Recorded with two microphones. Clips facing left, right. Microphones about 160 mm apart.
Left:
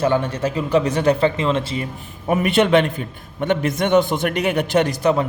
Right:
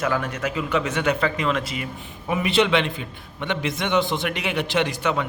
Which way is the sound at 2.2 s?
50° left (ahead or behind).